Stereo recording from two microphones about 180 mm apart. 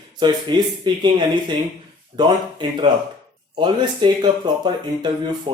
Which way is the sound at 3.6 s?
25° right (ahead or behind).